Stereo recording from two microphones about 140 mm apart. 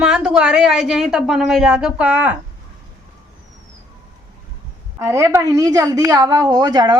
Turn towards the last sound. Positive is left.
turn(degrees=-30)  # may be behind; listen again after turning